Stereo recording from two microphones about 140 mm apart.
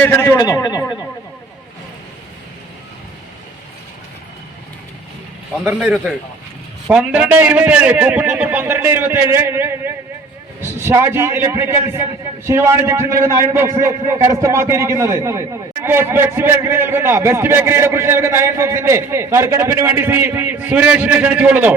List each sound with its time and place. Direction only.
0.0 s a man's voice: 15° left (ahead or behind)
6.9 s a man's voice: 5° right (ahead or behind)